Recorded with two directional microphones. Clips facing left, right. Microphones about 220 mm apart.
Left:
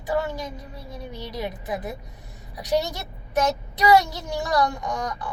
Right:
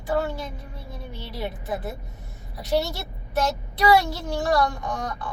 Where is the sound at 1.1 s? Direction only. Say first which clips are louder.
Left 1 dB; 15° left (ahead or behind).